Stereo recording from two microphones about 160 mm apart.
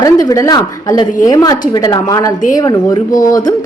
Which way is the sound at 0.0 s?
20° left (ahead or behind).